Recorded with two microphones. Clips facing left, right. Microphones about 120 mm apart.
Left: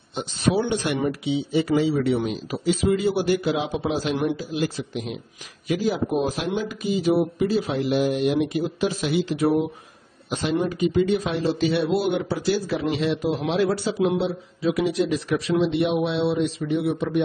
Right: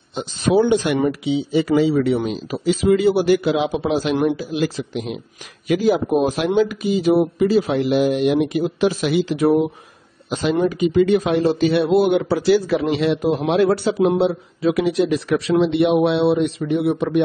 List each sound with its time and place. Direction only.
1.0 s a man's voice: 90° right
4.4 s a man's voice: 90° right
5.7 s speech: 70° right (ahead or behind)
12.8 s a man's voice: 60° right (ahead or behind)